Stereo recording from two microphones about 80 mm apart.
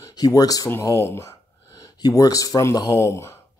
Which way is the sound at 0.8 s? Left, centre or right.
Left.